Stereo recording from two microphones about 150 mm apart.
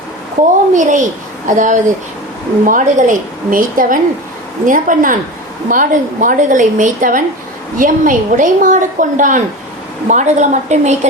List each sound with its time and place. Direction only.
0.7 s a woman's voice: 55° right (ahead or behind)